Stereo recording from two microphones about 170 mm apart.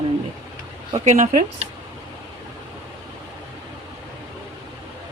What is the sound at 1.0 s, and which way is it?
Speech, 45° right (ahead or behind).